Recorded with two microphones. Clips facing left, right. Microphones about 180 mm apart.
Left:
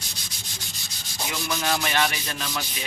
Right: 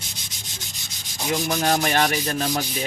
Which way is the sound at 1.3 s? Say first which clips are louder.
Right 6 dB; 45° right (ahead or behind).